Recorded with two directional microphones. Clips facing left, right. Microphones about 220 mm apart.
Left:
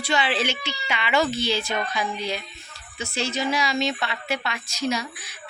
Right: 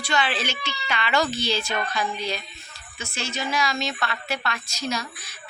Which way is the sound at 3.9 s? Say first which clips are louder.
Left 2 dB; 15° left (ahead or behind).